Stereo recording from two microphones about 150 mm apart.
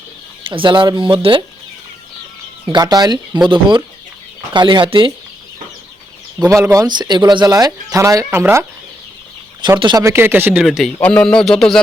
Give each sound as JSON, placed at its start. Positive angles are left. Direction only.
{"t": 0.4, "sound": "speech", "side_deg": -35}
{"t": 2.6, "sound": "speech", "side_deg": -25}
{"t": 6.5, "sound": "speech", "side_deg": -20}
{"t": 9.8, "sound": "speech", "side_deg": -25}
{"t": 10.6, "sound": "a man's voice", "side_deg": 0}